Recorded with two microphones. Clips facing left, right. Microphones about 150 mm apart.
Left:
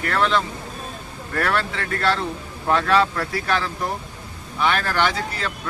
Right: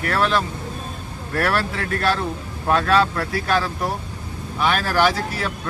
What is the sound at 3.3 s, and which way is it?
Speech, centre (ahead or behind).